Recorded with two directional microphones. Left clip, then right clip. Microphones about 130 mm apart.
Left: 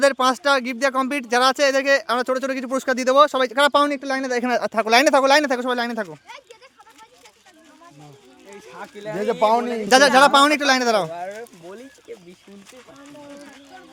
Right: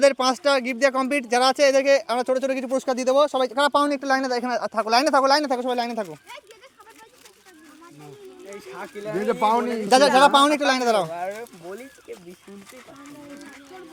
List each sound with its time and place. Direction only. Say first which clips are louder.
0.0 s speech: left 1 dB; 20° left (ahead or behind); by 3.9 s 35° left (ahead or behind)
3.9 s speech: right 2 dB; 25° left (ahead or behind)
4.5 s speech: left 5 dB; 45° left (ahead or behind); by 6.4 s 30° left (ahead or behind)
8.4 s speech: right 1 dB; 5° right (ahead or behind)
9.2 s speech: left 3 dB; 65° left (ahead or behind)
9.9 s speech: left 2 dB; 40° left (ahead or behind)
11.1 s speech: right 1 dB; centre (ahead or behind)